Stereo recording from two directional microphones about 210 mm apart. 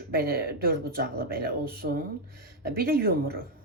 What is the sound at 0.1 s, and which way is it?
Speech, 45° right (ahead or behind).